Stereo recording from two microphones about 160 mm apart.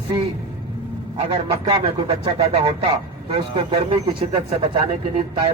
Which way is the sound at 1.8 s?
30° right (ahead or behind).